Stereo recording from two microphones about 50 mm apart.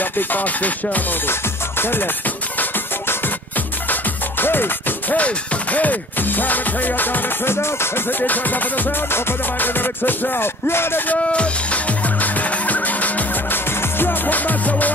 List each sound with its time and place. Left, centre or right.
0.0 s music: left
8.2 s music: left
9.1 s music: left
11.3 s music: left